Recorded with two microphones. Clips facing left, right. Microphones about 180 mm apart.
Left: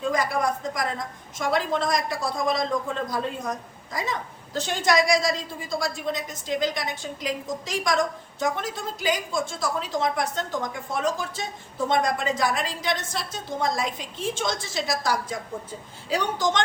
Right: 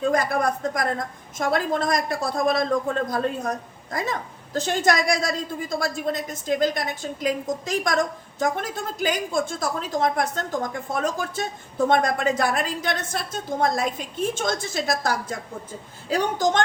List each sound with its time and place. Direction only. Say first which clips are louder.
0.1 s a woman's voice: right 2 dB; 55° right (ahead or behind)